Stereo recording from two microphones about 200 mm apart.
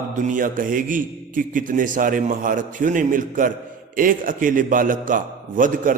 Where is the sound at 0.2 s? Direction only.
40° right (ahead or behind).